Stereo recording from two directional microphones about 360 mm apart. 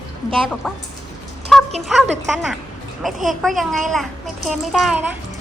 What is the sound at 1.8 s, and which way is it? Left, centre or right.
Speech, centre.